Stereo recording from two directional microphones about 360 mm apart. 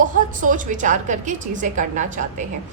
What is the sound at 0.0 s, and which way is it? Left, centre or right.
A woman's voice, right.